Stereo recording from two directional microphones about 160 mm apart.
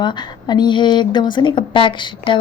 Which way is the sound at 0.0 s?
25° left (ahead or behind).